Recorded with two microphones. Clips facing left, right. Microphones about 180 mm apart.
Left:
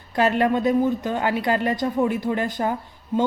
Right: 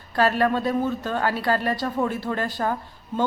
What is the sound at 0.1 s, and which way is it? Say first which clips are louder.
Speech: left 1 dB; 20° left (ahead or behind).